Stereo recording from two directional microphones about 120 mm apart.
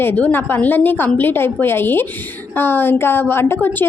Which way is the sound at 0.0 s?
15° left (ahead or behind).